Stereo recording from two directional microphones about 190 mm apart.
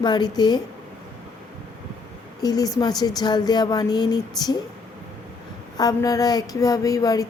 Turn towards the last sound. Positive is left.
turn(degrees=20)  # may be behind; listen again after turning